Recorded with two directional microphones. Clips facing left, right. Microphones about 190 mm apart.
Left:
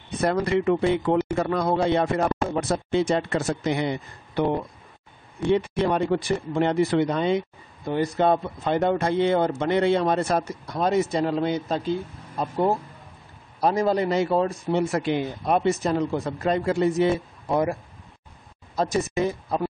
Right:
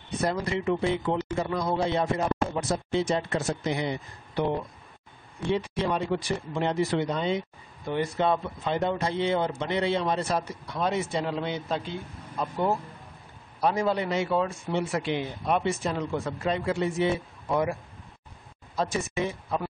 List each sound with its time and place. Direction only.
0.2 s speech: 60° left (ahead or behind)
5.5 s speech: 55° left (ahead or behind)
7.9 s a man's voice: 40° left (ahead or behind)
18.8 s a man's voice: 40° left (ahead or behind)